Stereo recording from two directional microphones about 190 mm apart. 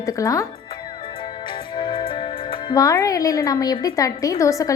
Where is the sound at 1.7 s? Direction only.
25° left (ahead or behind).